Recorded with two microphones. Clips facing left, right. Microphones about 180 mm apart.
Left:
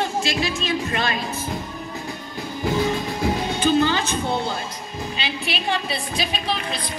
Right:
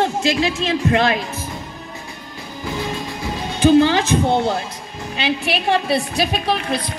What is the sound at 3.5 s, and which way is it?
A woman's voice, 70° right (ahead or behind).